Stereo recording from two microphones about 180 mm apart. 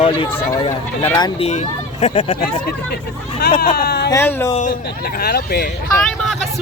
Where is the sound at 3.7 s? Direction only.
60° left (ahead or behind).